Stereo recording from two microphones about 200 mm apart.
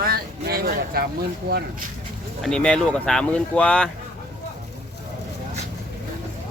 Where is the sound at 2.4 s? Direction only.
5° left (ahead or behind).